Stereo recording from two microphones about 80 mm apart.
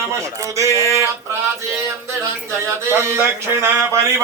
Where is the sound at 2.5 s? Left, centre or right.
Right.